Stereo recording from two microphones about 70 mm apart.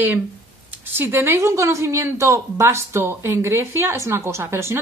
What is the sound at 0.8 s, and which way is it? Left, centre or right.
Speech, right.